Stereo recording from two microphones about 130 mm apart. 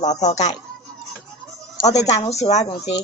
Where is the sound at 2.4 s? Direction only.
60° left (ahead or behind).